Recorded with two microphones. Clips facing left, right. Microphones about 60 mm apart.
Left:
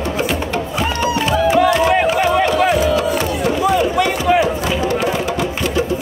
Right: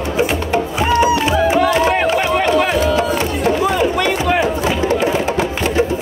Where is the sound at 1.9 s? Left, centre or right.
Right.